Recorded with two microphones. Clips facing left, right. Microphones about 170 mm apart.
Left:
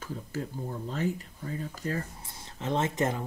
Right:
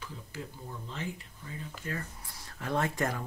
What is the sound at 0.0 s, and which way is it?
Speech, 45° left (ahead or behind).